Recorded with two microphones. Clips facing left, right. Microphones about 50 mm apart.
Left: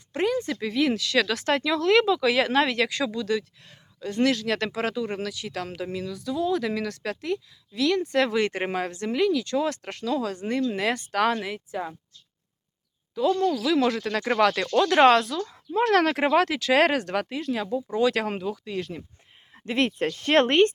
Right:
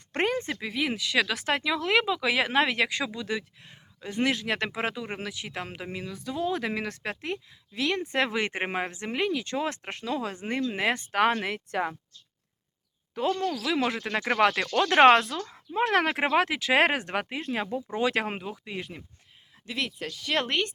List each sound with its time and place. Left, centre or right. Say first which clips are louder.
0.1 s a sound: left 2 dB; right
0.6 s speech: left 5 dB; centre; by 11.3 s right
11.3 s speech: right 1 dB; right
13.1 s speech: left 5 dB; right
13.7 s speech: left 4 dB; right
19.6 s speech: left 8 dB; left